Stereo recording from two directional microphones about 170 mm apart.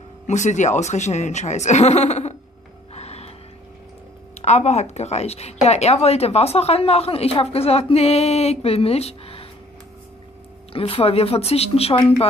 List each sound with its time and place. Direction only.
0.3 s speech: 45° left (ahead or behind)
2.9 s music: 40° left (ahead or behind)
4.4 s a woman's voice: 40° left (ahead or behind)
10.7 s a woman's voice: 35° left (ahead or behind)